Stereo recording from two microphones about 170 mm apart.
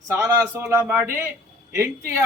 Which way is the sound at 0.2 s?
15° right (ahead or behind).